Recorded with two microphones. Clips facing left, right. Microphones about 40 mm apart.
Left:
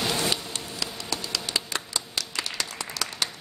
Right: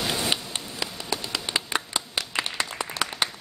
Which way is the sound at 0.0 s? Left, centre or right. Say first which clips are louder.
Left 1 dB; centre.